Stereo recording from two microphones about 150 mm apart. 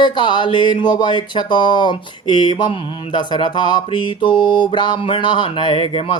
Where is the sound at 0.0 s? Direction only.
30° left (ahead or behind).